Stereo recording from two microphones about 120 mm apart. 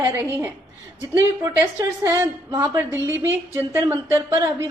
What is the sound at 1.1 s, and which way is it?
A woman's voice, 20° right (ahead or behind).